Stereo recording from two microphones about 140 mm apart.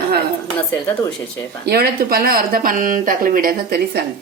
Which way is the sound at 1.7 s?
90° right.